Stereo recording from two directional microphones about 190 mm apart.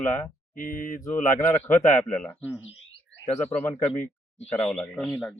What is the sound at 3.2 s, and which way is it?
Speech, 35° left (ahead or behind).